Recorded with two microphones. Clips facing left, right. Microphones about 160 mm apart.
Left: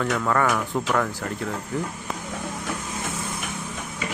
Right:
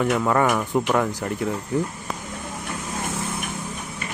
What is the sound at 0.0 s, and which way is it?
Speech, 15° right (ahead or behind).